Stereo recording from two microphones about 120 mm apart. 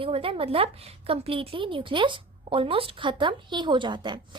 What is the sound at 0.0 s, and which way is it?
A woman's voice, 50° right (ahead or behind).